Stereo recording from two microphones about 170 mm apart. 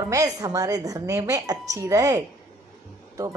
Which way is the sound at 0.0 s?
20° right (ahead or behind).